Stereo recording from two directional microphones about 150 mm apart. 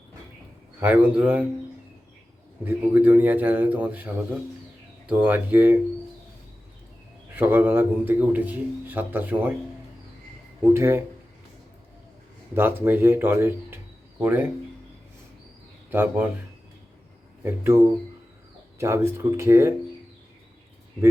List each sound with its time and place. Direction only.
0.8 s a man's voice: 10° right (ahead or behind)
2.6 s a man's voice: 10° right (ahead or behind)
7.3 s a man's voice: 15° right (ahead or behind)
10.8 s a man's voice: 15° right (ahead or behind)
12.5 s a man's voice: 15° right (ahead or behind)
15.9 s a man's voice: 15° right (ahead or behind)
17.4 s a man's voice: 15° right (ahead or behind)
18.8 s a man's voice: 20° right (ahead or behind)